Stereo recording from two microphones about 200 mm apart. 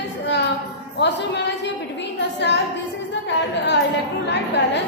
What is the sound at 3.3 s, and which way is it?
Speech, 60° left (ahead or behind).